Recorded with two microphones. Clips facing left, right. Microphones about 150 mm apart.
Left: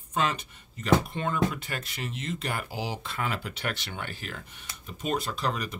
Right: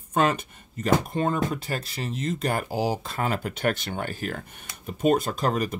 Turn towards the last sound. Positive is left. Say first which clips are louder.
# right 6 dB
turn(degrees=-45)  # may be behind; listen again after turning